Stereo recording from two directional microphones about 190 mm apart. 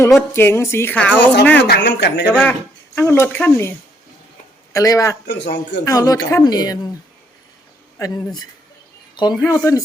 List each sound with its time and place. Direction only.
0.1 s speech: 10° left (ahead or behind)
1.6 s speech: 60° left (ahead or behind)
2.4 s speech: 10° left (ahead or behind)
5.2 s speech: 65° left (ahead or behind)
5.8 s speech: 15° left (ahead or behind)
7.9 s speech: 20° left (ahead or behind)